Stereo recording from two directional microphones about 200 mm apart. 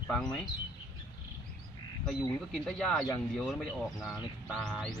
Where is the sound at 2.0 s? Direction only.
Centre (ahead or behind).